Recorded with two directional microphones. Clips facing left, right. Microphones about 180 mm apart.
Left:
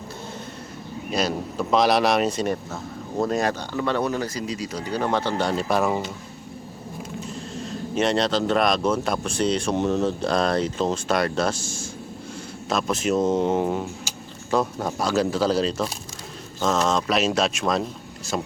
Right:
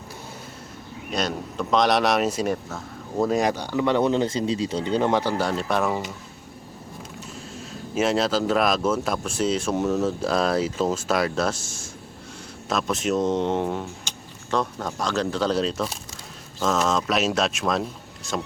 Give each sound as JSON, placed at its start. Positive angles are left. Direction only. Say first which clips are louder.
{"t": 1.1, "sound": "speech", "louder": "left 2 dB", "side_deg": 5}
{"t": 3.3, "sound": "speech", "louder": "right 2 dB", "side_deg": -10}
{"t": 5.4, "sound": "speech", "louder": "left 1 dB", "side_deg": 0}
{"t": 7.3, "sound": "speech", "louder": "left 5 dB", "side_deg": -5}